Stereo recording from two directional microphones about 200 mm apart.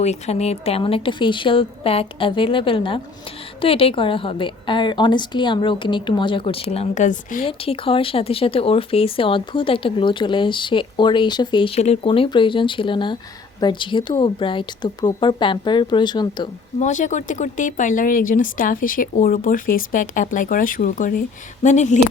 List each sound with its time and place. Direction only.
0.0 s speech: 35° left (ahead or behind)
7.4 s speech: 30° left (ahead or behind)
16.8 s speech: 40° left (ahead or behind)